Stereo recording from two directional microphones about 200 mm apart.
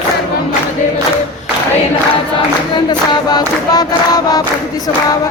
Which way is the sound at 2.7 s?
20° left (ahead or behind).